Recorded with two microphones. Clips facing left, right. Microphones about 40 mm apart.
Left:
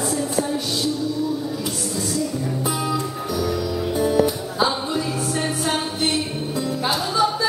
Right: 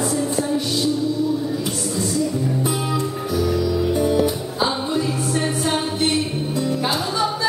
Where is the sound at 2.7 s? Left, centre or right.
Right.